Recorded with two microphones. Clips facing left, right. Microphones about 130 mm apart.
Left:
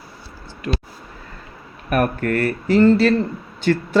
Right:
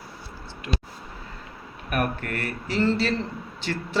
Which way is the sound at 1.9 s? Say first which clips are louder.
Left 8 dB; 45° left (ahead or behind).